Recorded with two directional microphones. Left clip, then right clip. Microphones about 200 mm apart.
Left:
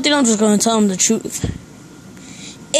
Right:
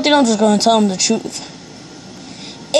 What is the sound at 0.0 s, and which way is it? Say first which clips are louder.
A woman's voice: right 2 dB; 45° left (ahead or behind).